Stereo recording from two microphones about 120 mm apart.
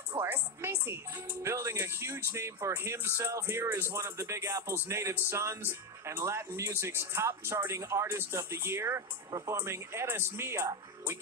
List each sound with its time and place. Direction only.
0.2 s speech: 20° right (ahead or behind)